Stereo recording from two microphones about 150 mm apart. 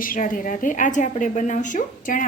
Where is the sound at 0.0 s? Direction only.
65° left (ahead or behind).